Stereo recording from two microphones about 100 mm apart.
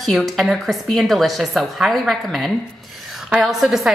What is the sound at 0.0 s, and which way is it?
A woman's voice, centre (ahead or behind).